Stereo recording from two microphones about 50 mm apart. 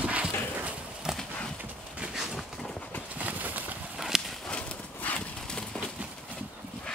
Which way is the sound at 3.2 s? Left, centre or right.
Right.